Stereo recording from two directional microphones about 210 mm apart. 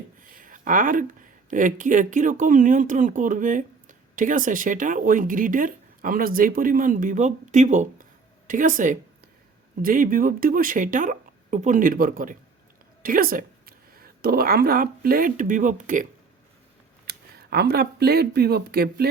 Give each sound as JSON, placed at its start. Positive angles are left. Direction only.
{"t": 0.2, "sound": "speech", "side_deg": -40}
{"t": 17.1, "sound": "speech", "side_deg": -50}